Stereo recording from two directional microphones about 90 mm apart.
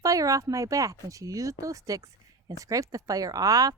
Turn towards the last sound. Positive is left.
turn(degrees=-40)  # may be behind; listen again after turning